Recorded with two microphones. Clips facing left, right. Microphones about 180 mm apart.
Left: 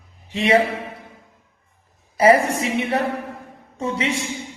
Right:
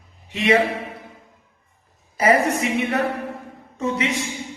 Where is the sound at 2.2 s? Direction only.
30° left (ahead or behind).